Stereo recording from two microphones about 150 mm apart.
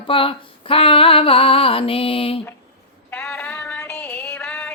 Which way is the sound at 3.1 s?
10° left (ahead or behind).